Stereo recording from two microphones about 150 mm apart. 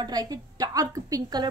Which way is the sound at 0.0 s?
25° right (ahead or behind).